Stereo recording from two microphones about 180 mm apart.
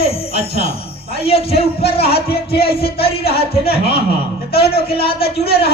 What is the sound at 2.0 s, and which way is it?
Speech, 60° left (ahead or behind).